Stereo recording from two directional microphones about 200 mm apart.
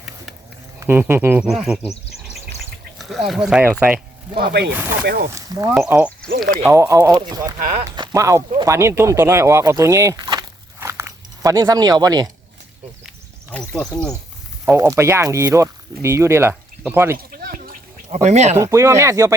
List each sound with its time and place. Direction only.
0.8 s speech: 10° right (ahead or behind)
3.0 s speech: centre (ahead or behind)
4.4 s speech: 55° right (ahead or behind)
5.3 s speech: 15° right (ahead or behind)
7.6 s speech: 45° right (ahead or behind)
7.9 s speech: 20° right (ahead or behind)
10.8 s biting: 10° right (ahead or behind)
13.5 s speech: 5° left (ahead or behind)
14.6 s speech: 15° right (ahead or behind)
17.3 s a sound: 45° right (ahead or behind)
18.5 s speech: 15° right (ahead or behind)